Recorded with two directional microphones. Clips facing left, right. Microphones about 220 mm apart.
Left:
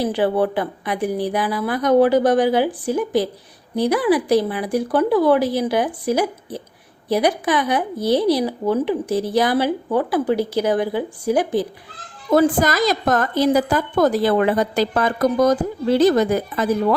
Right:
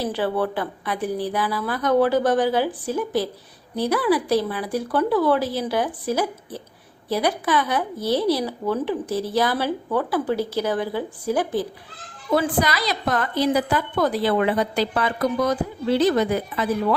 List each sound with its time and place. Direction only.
0.0 s speech: 15° left (ahead or behind)
12.3 s a woman's voice: 45° left (ahead or behind)